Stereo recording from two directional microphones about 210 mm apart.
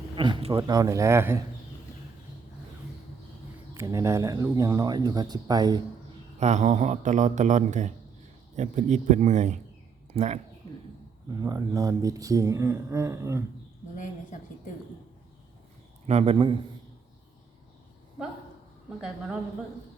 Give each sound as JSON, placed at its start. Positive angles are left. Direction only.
{"t": 0.2, "sound": "speech", "side_deg": -25}
{"t": 3.8, "sound": "speech", "side_deg": -15}
{"t": 6.4, "sound": "speech", "side_deg": -35}
{"t": 11.3, "sound": "speech", "side_deg": -15}
{"t": 13.9, "sound": "a sound", "side_deg": 35}
{"t": 16.0, "sound": "a man's voice", "side_deg": -30}